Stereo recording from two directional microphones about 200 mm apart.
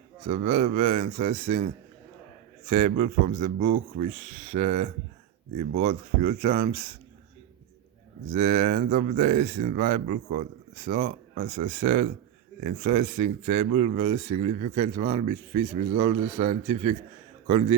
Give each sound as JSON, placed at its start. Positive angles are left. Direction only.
{"t": 0.3, "sound": "speech", "side_deg": -40}
{"t": 2.6, "sound": "speech", "side_deg": -40}
{"t": 8.3, "sound": "speech", "side_deg": -40}